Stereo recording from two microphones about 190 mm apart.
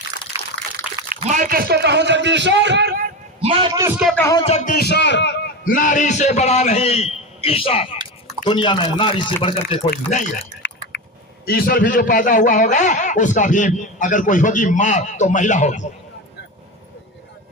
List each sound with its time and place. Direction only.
0.8 s a sound: 5° right (ahead or behind)
1.2 s a man's voice: 40° right (ahead or behind); by 3.0 s 65° right (ahead or behind)
3.4 s a man's voice: 30° right (ahead or behind)
3.8 s a man's voice: 15° right (ahead or behind)
4.0 s speech: 5° left (ahead or behind)
4.4 s a man's voice: 40° left (ahead or behind); by 5.7 s 65° left (ahead or behind)
5.7 s a man's voice: 45° left (ahead or behind)
10.1 s a man's voice: 40° left (ahead or behind)
10.6 s chewing: 65° left (ahead or behind)
11.4 s a man's voice: 55° left (ahead or behind)